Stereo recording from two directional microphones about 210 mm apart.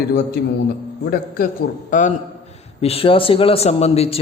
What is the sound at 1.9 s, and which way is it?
Mantra, 35° left (ahead or behind).